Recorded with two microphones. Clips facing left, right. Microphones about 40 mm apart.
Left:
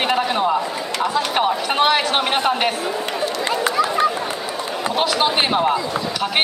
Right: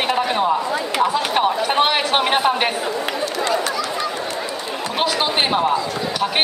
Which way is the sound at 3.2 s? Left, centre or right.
Left.